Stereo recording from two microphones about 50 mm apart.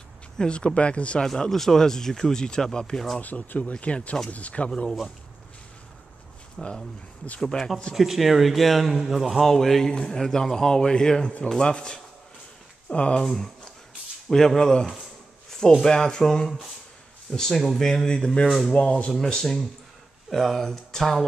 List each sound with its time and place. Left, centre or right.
0.4 s speech: centre
1.2 s speech: centre
3.2 s speech: left
6.6 s a man's voice: centre; by 13.2 s left
13.2 s speech: centre
19.1 s speech: centre